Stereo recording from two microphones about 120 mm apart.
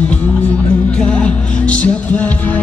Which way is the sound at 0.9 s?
10° left (ahead or behind).